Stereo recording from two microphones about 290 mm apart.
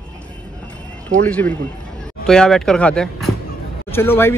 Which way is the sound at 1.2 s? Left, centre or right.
Centre.